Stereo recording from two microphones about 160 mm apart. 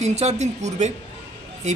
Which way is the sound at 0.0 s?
45° right (ahead or behind).